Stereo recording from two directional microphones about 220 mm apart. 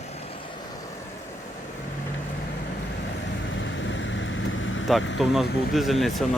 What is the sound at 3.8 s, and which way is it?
Vehicle, 55° left (ahead or behind).